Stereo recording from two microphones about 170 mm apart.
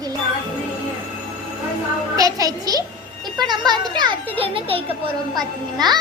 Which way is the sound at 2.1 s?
20° right (ahead or behind).